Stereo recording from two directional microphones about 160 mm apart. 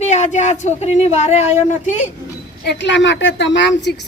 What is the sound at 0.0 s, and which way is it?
Speech, 45° left (ahead or behind).